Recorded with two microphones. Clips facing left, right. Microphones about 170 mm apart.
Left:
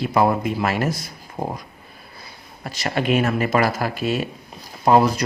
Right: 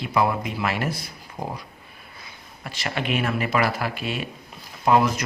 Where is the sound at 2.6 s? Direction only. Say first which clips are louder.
Left 5 dB; 40° left (ahead or behind).